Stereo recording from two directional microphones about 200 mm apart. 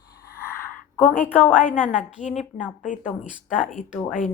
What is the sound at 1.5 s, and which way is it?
A woman's voice, 40° left (ahead or behind).